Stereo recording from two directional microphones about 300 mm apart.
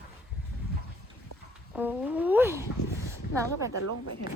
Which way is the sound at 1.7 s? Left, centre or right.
Centre.